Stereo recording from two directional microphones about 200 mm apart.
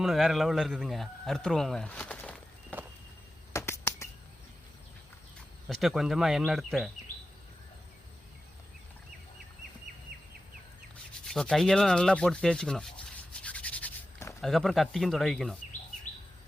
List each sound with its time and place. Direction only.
0.0 s speech: centre (ahead or behind)
3.5 s finger snapping: 15° left (ahead or behind)
5.6 s speech: centre (ahead or behind)
10.1 s bird: 50° right (ahead or behind)
11.3 s sanding: centre (ahead or behind)
14.4 s speech: centre (ahead or behind)